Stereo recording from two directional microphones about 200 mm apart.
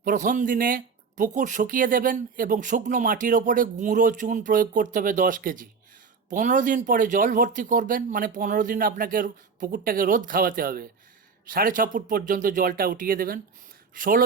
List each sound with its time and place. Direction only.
0.0 s speech: 40° right (ahead or behind)